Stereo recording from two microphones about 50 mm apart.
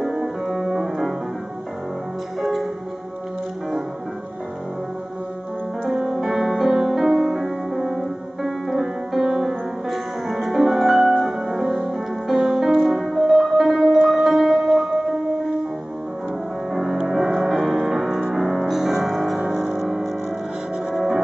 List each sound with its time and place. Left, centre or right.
0.0 s organ: centre
5.9 s music: centre
16.7 s music: centre